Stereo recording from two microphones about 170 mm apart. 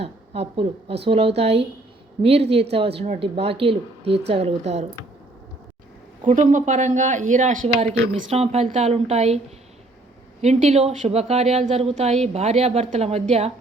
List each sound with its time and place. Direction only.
0.0 s a woman's voice: 35° right (ahead or behind)
6.2 s speech: 45° right (ahead or behind)
8.3 s a woman's voice: 35° right (ahead or behind)
10.4 s a woman's voice: 40° right (ahead or behind)